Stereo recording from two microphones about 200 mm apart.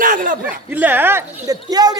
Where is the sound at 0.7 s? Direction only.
10° right (ahead or behind).